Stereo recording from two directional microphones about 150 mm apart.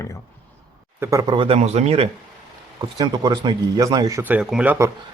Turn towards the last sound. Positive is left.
turn(degrees=-10)  # may be behind; listen again after turning